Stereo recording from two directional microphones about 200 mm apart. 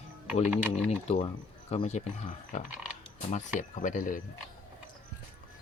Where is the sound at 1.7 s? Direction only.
35° left (ahead or behind).